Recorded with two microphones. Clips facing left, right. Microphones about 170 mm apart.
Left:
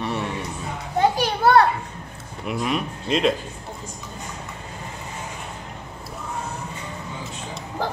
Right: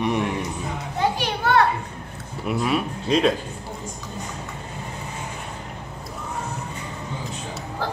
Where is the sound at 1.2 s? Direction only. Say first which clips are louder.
Left 3 dB; 40° left (ahead or behind).